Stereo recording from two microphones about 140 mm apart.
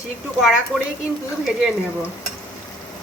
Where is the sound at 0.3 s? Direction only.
Centre (ahead or behind).